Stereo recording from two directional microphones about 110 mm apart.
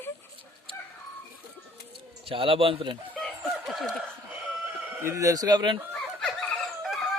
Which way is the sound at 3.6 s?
Centre (ahead or behind).